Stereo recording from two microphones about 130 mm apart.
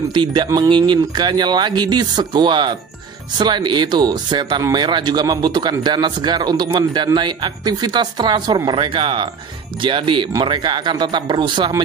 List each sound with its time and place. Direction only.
0.1 s a woman's voice: 35° right (ahead or behind)